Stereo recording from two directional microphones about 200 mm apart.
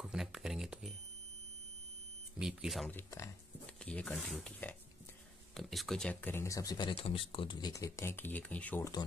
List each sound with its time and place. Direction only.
0.0 s a sound: centre (ahead or behind)
2.3 s speech: 5° right (ahead or behind)
2.9 s speech: 10° left (ahead or behind)